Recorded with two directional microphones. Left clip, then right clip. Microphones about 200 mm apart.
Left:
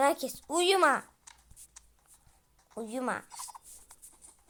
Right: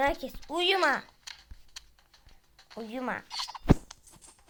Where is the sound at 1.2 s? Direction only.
30° right (ahead or behind).